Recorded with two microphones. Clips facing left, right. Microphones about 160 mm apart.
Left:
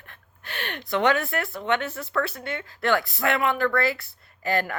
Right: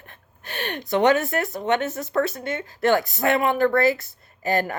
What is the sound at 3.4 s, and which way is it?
Speech, 45° right (ahead or behind).